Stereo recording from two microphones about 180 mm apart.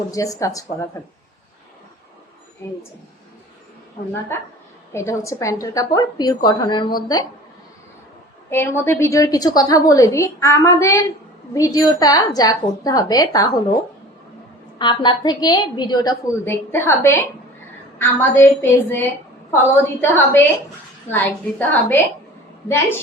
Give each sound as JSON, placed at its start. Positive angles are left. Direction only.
{"t": 0.1, "sound": "a woman's voice", "side_deg": 20}
{"t": 4.9, "sound": "a woman's voice", "side_deg": 15}
{"t": 8.4, "sound": "a woman's voice", "side_deg": 15}
{"t": 14.8, "sound": "a woman's voice", "side_deg": 25}
{"t": 18.2, "sound": "a woman's voice", "side_deg": 15}